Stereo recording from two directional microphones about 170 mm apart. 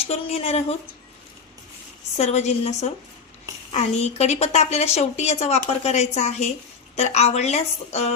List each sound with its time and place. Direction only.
0.1 s a woman's voice: 35° left (ahead or behind)
2.1 s a woman's voice: 40° left (ahead or behind)